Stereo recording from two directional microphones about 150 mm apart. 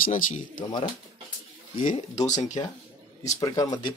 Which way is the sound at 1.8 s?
55° left (ahead or behind).